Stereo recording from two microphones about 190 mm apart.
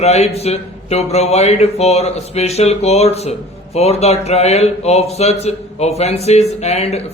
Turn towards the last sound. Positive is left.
turn(degrees=35)  # may be behind; listen again after turning